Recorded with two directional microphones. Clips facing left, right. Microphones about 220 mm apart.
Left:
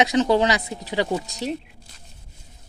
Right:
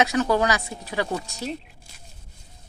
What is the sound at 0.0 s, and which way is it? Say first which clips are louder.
Speech: left 3 dB; 20° left (ahead or behind).